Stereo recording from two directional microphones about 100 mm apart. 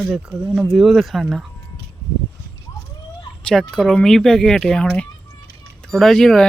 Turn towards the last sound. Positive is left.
turn(degrees=5)  # may be behind; listen again after turning